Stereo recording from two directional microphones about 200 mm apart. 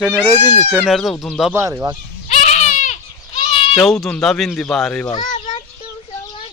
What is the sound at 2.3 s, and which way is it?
Goat, 35° left (ahead or behind).